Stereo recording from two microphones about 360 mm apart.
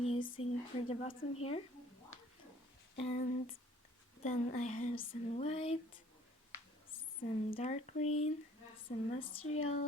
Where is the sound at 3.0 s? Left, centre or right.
Centre.